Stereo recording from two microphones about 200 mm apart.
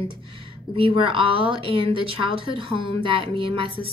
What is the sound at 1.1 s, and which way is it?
A woman's voice, 25° right (ahead or behind).